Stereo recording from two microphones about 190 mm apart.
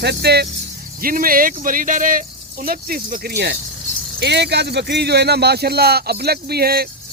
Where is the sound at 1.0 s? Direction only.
50° right (ahead or behind).